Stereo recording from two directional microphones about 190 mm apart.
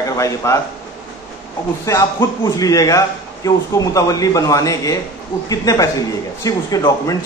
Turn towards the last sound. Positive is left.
turn(degrees=20)  # may be behind; listen again after turning